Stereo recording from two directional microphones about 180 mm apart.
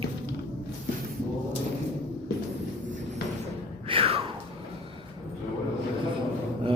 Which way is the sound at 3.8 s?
30° right (ahead or behind).